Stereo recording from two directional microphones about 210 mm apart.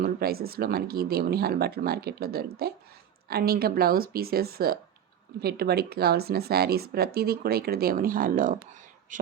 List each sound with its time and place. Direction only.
0.0 s speech: 45° right (ahead or behind)